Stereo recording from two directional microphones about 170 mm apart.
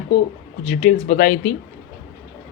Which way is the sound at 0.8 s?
40° left (ahead or behind).